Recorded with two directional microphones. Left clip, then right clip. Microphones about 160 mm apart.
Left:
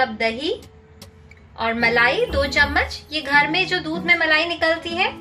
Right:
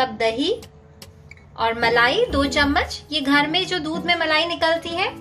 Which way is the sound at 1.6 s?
50° right (ahead or behind).